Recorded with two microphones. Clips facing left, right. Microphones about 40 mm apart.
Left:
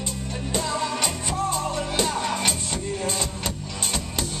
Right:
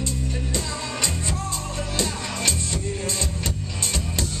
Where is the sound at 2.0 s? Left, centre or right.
Centre.